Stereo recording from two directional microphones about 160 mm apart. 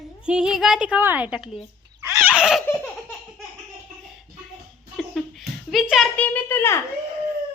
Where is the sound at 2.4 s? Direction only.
5° right (ahead or behind).